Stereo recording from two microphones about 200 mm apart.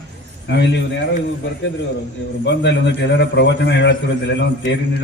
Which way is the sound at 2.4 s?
60° left (ahead or behind).